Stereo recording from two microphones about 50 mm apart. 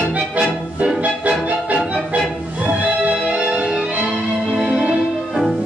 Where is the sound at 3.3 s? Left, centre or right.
Right.